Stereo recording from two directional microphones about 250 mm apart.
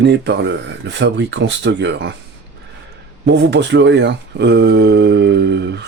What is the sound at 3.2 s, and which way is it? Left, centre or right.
Speech, right.